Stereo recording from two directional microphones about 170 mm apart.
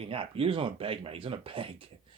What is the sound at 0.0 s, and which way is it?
Speech, 35° right (ahead or behind).